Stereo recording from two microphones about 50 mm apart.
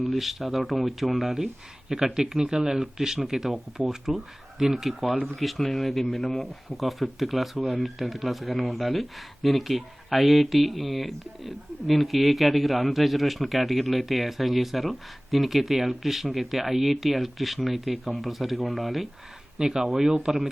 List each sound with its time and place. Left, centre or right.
0.0 s speech: centre
1.9 s speech: centre
19.5 s speech: centre